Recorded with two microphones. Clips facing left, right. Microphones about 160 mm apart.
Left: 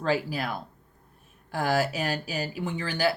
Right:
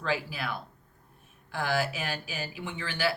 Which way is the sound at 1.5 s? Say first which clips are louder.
Left 4 dB; 40° left (ahead or behind).